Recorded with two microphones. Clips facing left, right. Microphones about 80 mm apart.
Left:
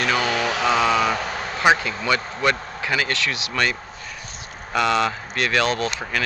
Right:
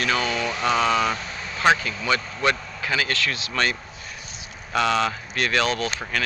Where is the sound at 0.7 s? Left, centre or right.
Centre.